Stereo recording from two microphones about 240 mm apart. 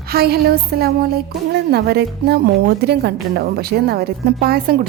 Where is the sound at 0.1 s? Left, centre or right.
Right.